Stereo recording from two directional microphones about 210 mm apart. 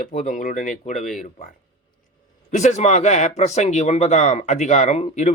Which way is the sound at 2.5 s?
35° left (ahead or behind).